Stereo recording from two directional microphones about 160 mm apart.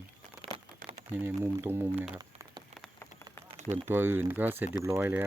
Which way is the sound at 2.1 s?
25° right (ahead or behind).